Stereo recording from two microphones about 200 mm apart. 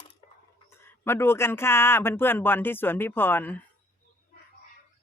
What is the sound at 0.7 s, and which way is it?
Speech, 10° left (ahead or behind).